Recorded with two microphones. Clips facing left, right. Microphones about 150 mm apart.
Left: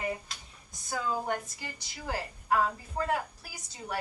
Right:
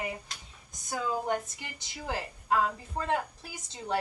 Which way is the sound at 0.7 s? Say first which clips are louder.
Even; 20° right (ahead or behind).